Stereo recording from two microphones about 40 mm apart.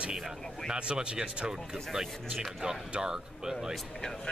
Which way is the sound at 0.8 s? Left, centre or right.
Right.